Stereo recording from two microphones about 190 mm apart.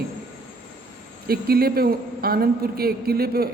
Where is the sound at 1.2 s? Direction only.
55° right (ahead or behind).